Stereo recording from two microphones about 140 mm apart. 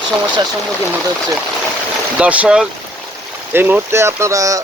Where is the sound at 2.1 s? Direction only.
10° right (ahead or behind).